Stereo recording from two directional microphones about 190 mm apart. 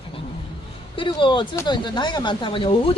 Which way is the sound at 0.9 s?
25° left (ahead or behind).